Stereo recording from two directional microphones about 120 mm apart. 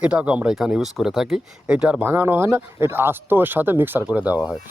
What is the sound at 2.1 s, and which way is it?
Speech, 20° right (ahead or behind).